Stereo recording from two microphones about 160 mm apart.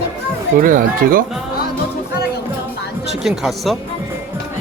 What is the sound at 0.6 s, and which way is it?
Speech, 60° right (ahead or behind).